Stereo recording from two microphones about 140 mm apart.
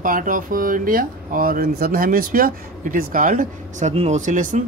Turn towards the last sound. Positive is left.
turn(degrees=-65)  # may be behind; listen again after turning